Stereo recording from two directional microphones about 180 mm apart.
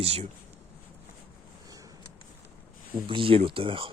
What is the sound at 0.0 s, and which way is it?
Speech, 35° right (ahead or behind).